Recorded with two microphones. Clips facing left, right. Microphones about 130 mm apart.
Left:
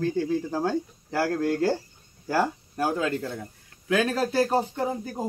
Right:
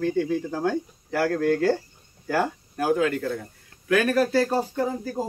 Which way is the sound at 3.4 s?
20° left (ahead or behind).